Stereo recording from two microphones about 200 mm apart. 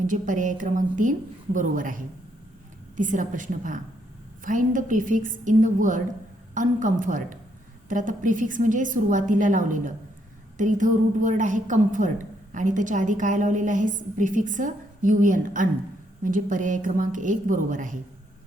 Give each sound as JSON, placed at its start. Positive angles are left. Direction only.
{"t": 0.0, "sound": "a woman's voice", "side_deg": -40}